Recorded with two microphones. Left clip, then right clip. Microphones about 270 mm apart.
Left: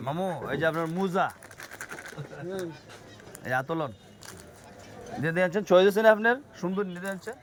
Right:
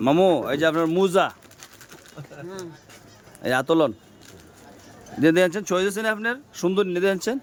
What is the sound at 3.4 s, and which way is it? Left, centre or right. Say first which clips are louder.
Speech: right 9 dB; right.